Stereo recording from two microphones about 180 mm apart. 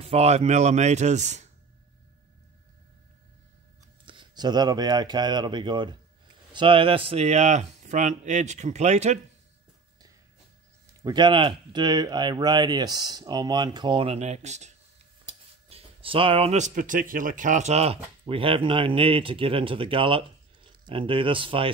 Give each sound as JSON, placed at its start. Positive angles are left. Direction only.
{"t": 0.1, "sound": "speech", "side_deg": -35}
{"t": 4.0, "sound": "speech", "side_deg": -25}
{"t": 11.1, "sound": "speech", "side_deg": -25}
{"t": 15.7, "sound": "speech", "side_deg": -30}